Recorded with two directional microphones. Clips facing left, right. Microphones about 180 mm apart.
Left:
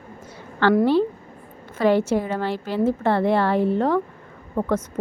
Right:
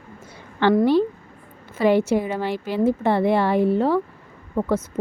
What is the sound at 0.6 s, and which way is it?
Speech, 15° right (ahead or behind).